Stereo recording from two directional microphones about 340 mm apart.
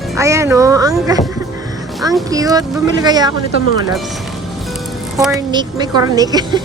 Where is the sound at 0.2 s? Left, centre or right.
Centre.